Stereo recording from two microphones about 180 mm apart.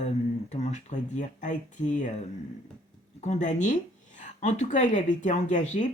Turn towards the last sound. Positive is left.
turn(degrees=45)  # may be behind; listen again after turning